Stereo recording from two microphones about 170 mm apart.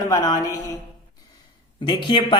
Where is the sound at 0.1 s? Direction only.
20° left (ahead or behind).